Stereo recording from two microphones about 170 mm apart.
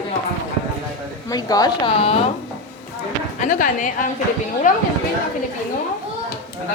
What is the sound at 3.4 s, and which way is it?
Speech, 50° left (ahead or behind).